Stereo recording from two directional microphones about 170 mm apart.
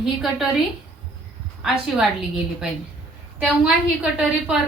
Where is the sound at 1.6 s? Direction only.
5° right (ahead or behind).